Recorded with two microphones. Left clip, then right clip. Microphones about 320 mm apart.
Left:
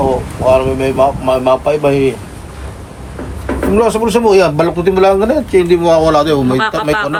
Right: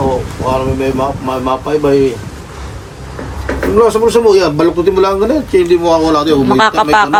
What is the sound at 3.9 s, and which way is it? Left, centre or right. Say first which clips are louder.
Speech: right 2 dB; left.